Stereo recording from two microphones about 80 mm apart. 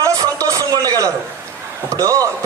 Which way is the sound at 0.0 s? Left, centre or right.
Right.